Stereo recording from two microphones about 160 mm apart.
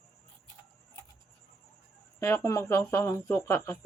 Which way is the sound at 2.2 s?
15° left (ahead or behind).